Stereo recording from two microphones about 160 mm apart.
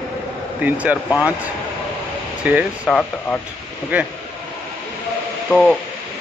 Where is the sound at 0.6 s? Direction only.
10° right (ahead or behind).